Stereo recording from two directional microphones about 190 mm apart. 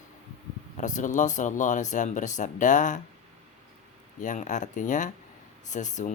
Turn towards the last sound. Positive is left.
turn(degrees=40)  # may be behind; listen again after turning